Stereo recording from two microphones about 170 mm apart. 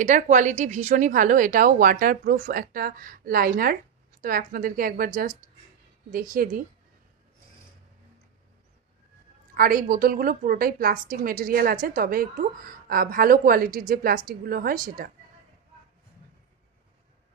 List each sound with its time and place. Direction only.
0.0 s a woman's voice: 45° right (ahead or behind)
9.6 s a woman's voice: 60° right (ahead or behind)